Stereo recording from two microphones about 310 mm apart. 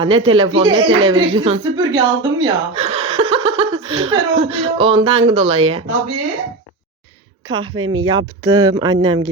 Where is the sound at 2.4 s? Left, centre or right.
Centre.